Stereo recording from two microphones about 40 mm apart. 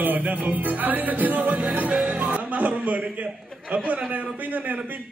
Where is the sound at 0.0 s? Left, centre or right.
Right.